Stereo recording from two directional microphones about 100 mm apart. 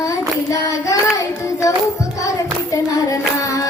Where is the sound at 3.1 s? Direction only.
35° left (ahead or behind).